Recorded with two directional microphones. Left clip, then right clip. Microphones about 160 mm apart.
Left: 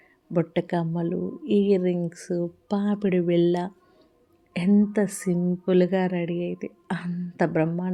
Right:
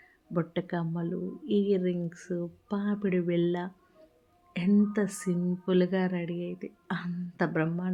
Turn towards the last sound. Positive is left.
turn(degrees=35)  # may be behind; listen again after turning